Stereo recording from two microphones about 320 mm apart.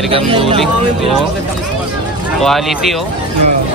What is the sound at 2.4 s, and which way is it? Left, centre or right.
Speech, centre.